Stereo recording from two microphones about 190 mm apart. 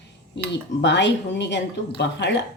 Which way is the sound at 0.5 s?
70° left (ahead or behind).